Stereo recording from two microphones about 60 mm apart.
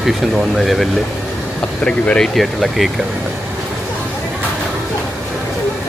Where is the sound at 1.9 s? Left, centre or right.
Centre.